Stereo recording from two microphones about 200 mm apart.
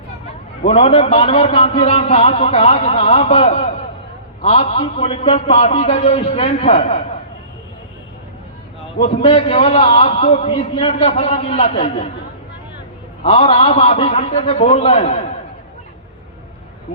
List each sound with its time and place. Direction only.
0.7 s a man's voice: 30° left (ahead or behind)
9.0 s a man's voice: 30° left (ahead or behind)
13.2 s a man's voice: 30° left (ahead or behind)